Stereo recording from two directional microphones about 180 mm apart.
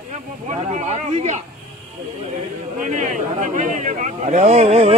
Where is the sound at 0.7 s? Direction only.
40° right (ahead or behind).